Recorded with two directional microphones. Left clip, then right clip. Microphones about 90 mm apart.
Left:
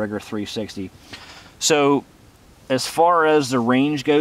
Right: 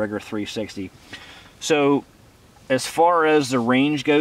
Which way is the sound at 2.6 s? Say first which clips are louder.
Left 1 dB; 45° left (ahead or behind).